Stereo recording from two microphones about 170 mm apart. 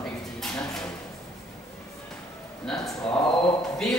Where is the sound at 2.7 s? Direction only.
5° left (ahead or behind).